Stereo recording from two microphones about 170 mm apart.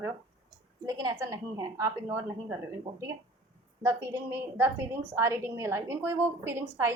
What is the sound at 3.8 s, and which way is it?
A woman's voice, 20° right (ahead or behind).